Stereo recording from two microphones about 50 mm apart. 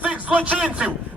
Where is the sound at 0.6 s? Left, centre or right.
Centre.